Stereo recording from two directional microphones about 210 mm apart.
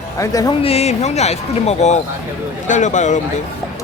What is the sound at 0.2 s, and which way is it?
Speech, 15° left (ahead or behind).